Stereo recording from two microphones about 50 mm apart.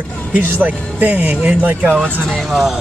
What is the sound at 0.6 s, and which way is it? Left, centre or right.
Speech, right.